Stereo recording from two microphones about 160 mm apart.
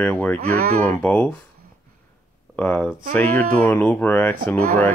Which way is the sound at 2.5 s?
10° left (ahead or behind).